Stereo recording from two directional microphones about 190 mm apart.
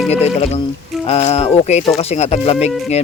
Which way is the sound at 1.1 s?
35° left (ahead or behind).